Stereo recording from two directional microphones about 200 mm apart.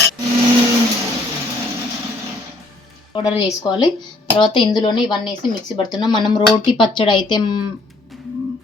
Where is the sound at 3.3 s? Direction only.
20° left (ahead or behind).